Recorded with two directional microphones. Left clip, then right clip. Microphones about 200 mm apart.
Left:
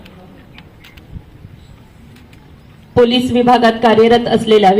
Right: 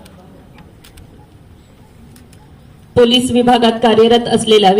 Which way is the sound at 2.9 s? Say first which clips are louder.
Right 1 dB; 40° left (ahead or behind).